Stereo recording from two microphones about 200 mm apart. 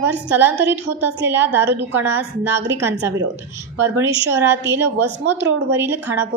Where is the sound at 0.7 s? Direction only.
10° right (ahead or behind).